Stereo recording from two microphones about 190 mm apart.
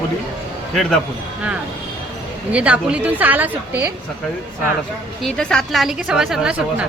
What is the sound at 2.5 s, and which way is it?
A woman's voice, 5° right (ahead or behind).